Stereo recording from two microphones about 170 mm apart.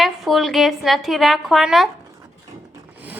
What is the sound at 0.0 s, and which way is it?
A woman's voice, centre (ahead or behind).